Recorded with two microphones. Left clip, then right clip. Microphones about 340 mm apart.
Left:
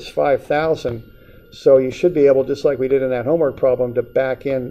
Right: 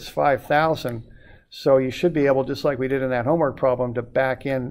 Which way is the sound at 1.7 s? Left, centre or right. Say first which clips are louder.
Left 5 dB; right.